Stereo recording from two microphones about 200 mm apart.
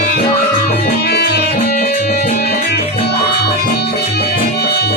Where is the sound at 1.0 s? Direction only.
55° left (ahead or behind).